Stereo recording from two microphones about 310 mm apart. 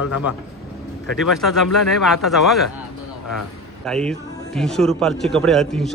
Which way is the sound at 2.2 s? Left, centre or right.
Centre.